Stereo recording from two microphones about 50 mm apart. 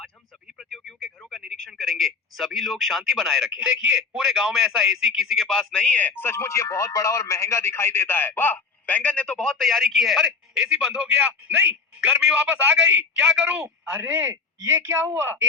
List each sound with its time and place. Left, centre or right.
0.7 s radio: centre
1.5 s a man's voice: centre
5.7 s speech: left
6.0 s speech: left
6.2 s speech: left
9.5 s a man's voice: centre; by 14.3 s right
15.0 s speech: right